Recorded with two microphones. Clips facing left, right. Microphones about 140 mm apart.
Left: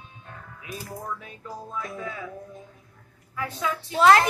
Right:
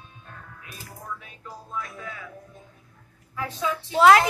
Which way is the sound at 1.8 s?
25° left (ahead or behind).